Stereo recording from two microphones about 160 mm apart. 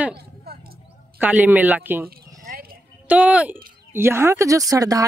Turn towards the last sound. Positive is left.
turn(degrees=-20)  # may be behind; listen again after turning